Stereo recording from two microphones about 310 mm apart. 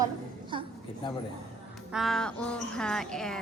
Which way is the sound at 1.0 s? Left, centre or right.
Centre.